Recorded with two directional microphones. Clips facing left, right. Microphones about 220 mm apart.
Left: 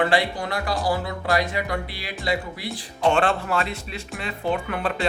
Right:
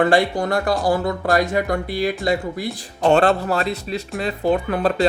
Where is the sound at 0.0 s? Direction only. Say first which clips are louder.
Right 5 dB; 45° right (ahead or behind).